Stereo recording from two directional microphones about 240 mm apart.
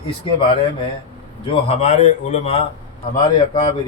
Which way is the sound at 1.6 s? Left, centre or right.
Left.